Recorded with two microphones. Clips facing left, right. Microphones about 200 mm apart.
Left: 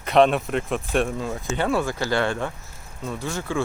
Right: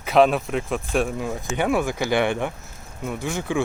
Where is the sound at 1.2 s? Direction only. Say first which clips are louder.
Right 1 dB; 15° right (ahead or behind).